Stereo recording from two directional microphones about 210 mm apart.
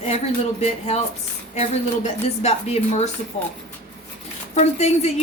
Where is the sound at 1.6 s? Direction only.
30° left (ahead or behind).